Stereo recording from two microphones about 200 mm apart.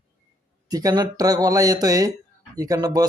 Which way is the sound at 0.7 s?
20° right (ahead or behind).